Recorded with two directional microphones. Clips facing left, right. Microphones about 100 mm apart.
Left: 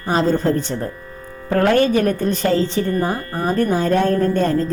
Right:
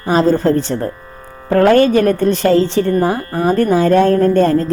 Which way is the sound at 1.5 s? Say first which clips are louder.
Right 5 dB; 90° right.